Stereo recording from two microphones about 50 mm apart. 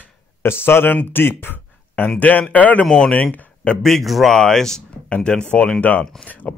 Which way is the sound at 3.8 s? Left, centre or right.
Centre.